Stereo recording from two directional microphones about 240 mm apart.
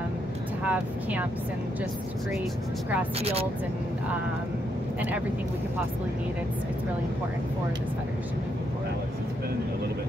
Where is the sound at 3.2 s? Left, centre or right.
Right.